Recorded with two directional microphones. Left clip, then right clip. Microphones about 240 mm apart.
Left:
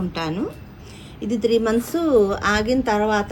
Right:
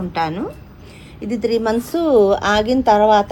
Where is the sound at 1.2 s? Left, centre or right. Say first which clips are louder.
Right 1 dB; right.